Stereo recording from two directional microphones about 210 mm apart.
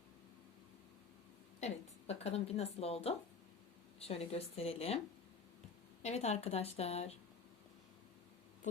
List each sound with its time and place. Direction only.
1.6 s a woman's voice: 30° left (ahead or behind)
6.0 s a woman's voice: 30° left (ahead or behind)